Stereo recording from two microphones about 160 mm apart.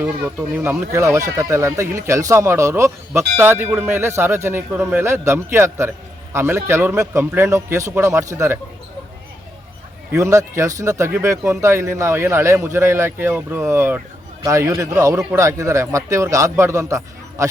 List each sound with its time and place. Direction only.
0.0 s speech: 10° right (ahead or behind)
10.1 s a man's voice: 20° right (ahead or behind)